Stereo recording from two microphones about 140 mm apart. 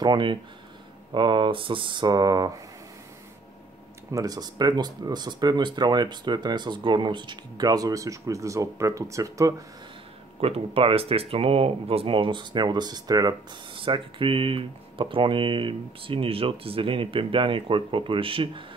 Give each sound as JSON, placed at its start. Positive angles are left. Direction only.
{"t": 0.0, "sound": "speech", "side_deg": -35}
{"t": 4.1, "sound": "speech", "side_deg": -25}
{"t": 10.4, "sound": "speech", "side_deg": -40}